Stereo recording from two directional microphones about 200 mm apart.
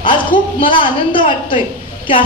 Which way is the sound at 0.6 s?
25° left (ahead or behind).